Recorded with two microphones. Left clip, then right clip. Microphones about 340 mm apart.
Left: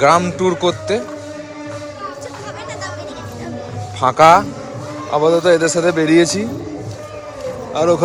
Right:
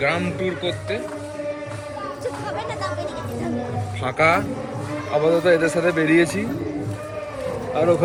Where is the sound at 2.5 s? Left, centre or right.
Centre.